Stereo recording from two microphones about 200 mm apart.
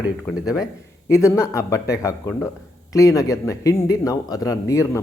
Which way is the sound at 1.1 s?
15° left (ahead or behind).